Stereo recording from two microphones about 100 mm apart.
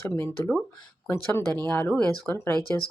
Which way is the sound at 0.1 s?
25° left (ahead or behind).